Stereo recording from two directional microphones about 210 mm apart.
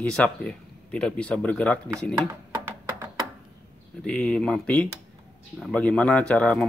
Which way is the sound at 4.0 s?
5° left (ahead or behind).